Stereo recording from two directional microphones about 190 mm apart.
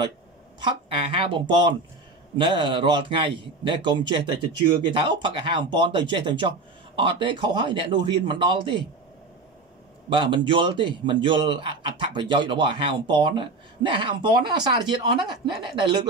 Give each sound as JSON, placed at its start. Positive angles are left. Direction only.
{"t": 0.6, "sound": "speech", "side_deg": -25}
{"t": 10.0, "sound": "speech", "side_deg": -25}